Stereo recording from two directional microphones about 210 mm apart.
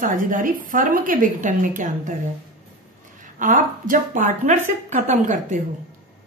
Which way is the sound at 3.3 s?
40° right (ahead or behind).